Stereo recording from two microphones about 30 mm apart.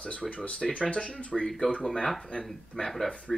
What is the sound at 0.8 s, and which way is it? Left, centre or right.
Speech, left.